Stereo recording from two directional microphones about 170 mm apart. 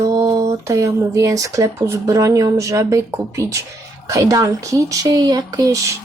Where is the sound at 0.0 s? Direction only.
20° right (ahead or behind).